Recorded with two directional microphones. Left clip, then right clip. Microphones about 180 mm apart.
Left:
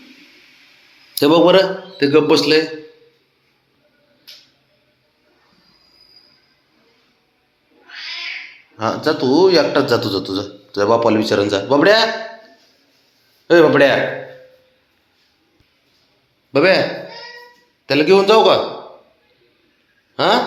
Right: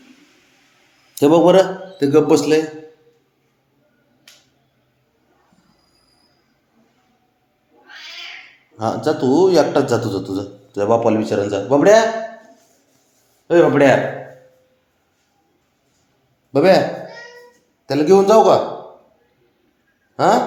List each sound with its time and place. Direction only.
1.2 s a man's voice: 20° right (ahead or behind)
9.0 s a man's voice: 15° right (ahead or behind)
10.8 s speech: centre (ahead or behind)
13.5 s a man's voice: 10° left (ahead or behind)
16.5 s a man's voice: 15° right (ahead or behind)
17.8 s a man's voice: 10° right (ahead or behind)
20.1 s a sound: 10° right (ahead or behind)